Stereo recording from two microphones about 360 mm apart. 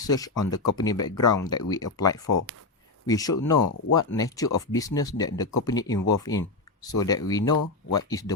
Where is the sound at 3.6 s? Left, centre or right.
Left.